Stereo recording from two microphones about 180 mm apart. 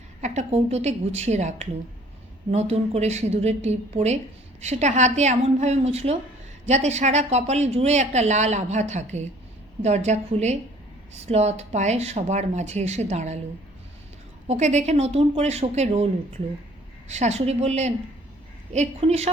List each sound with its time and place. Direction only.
0.2 s speech: 40° right (ahead or behind)
14.4 s speech: 40° right (ahead or behind)
17.1 s speech: 40° right (ahead or behind)